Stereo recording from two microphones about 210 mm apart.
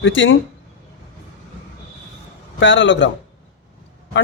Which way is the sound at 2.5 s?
60° left (ahead or behind).